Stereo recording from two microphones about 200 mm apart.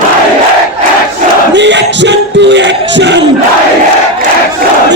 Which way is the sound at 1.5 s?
60° right (ahead or behind).